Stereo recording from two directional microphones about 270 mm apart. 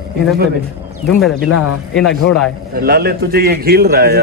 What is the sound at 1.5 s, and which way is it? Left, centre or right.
Speech, left.